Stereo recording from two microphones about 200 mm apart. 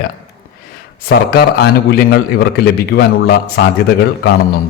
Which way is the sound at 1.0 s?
50° left (ahead or behind).